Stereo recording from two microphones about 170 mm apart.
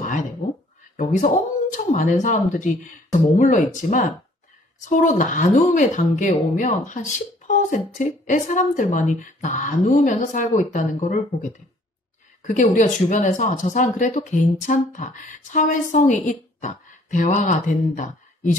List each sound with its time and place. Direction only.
0.9 s speech: 45° left (ahead or behind)